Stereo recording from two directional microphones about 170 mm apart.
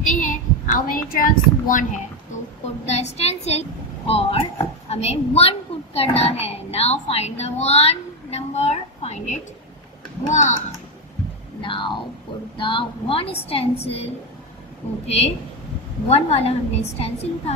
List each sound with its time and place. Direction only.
0.0 s a woman's voice: 50° left (ahead or behind)
11.6 s a woman's voice: 30° left (ahead or behind)